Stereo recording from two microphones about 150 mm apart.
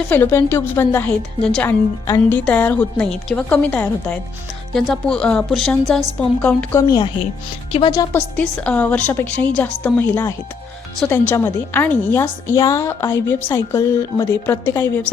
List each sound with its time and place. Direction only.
0.1 s a woman's voice: 15° left (ahead or behind)
7.7 s a woman's voice: 35° left (ahead or behind)
8.5 s speech: 10° left (ahead or behind)